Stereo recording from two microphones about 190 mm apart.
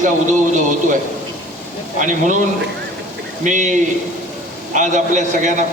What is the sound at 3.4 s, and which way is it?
Speech, 40° right (ahead or behind).